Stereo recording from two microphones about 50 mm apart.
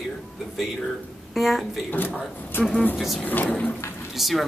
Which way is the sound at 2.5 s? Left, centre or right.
Left.